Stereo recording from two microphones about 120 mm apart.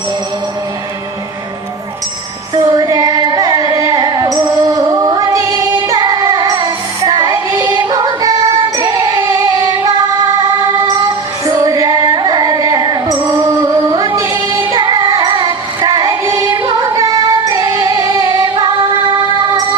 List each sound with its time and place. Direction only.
2.6 s music: 30° right (ahead or behind)
11.4 s music: 30° right (ahead or behind)